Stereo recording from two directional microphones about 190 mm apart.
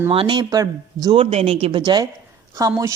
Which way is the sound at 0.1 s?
25° right (ahead or behind).